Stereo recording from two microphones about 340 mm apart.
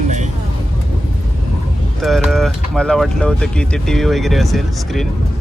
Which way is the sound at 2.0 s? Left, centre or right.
Centre.